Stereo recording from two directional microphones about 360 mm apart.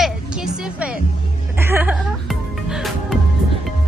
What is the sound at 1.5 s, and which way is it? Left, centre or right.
Music, centre.